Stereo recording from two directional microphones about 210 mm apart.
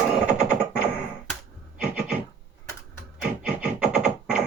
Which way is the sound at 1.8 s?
5° right (ahead or behind).